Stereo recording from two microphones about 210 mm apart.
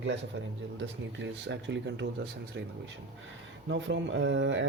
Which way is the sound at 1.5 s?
55° right (ahead or behind).